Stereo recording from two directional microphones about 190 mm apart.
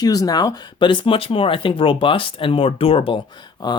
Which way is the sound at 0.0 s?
20° left (ahead or behind).